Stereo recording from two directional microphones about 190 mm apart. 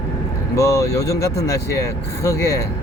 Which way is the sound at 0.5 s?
15° left (ahead or behind).